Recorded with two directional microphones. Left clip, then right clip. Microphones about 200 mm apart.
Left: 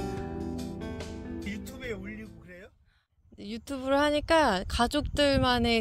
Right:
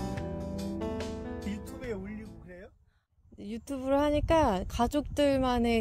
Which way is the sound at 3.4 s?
Centre (ahead or behind).